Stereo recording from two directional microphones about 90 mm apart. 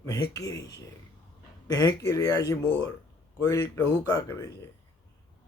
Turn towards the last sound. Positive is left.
turn(degrees=35)  # may be behind; listen again after turning